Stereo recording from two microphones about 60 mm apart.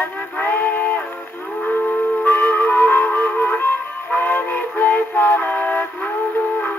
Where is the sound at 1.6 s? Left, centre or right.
Left.